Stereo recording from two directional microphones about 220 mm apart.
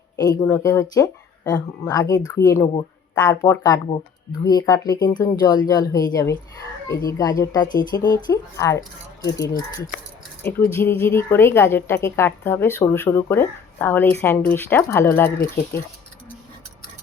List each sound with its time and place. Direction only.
0.2 s speech: 15° left (ahead or behind)